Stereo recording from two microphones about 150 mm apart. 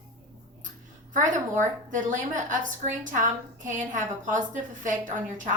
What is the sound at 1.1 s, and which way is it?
A woman's voice, 60° right (ahead or behind).